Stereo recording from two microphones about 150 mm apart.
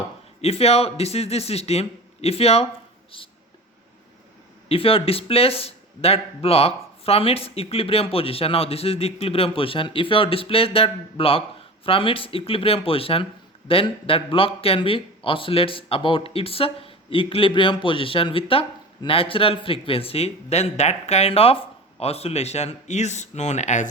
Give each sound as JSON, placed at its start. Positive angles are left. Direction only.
{"t": 0.4, "sound": "speech", "side_deg": 40}
{"t": 4.7, "sound": "speech", "side_deg": 40}